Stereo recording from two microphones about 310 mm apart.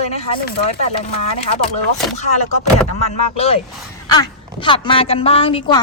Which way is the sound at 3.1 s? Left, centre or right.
Centre.